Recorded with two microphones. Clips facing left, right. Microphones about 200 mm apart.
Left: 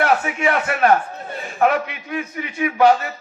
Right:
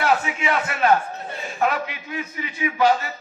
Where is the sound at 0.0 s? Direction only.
60° left (ahead or behind).